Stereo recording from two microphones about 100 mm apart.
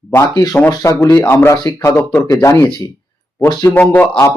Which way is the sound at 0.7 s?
30° left (ahead or behind).